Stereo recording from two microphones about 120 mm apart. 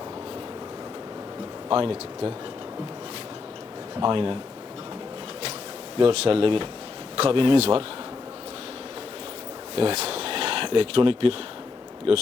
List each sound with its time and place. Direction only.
1.7 s speech: 50° right (ahead or behind)
4.0 s speech: 45° right (ahead or behind)
6.0 s speech: 50° right (ahead or behind)
9.7 s speech: 55° right (ahead or behind)